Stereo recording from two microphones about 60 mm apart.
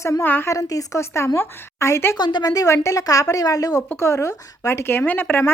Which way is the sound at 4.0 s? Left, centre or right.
Left.